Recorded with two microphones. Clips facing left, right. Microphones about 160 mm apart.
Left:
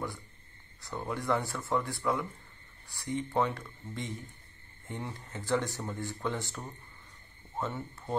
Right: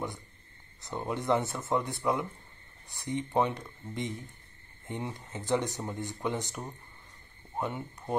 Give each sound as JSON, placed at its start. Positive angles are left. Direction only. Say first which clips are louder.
{"t": 0.8, "sound": "speech", "louder": "right 2 dB", "side_deg": -20}